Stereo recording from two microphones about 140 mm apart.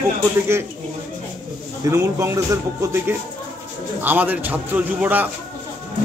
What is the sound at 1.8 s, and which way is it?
A man's voice, 20° right (ahead or behind).